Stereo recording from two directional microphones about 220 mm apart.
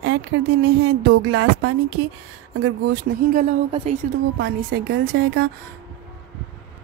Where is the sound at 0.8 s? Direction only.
65° right (ahead or behind).